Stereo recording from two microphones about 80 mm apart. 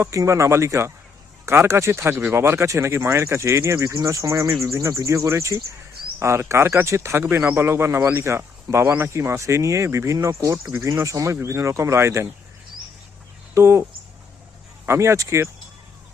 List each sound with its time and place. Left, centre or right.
0.0 s speech: right
13.5 s speech: right
14.8 s speech: right